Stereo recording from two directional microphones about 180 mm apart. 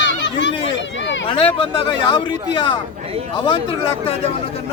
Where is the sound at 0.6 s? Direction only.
90° left.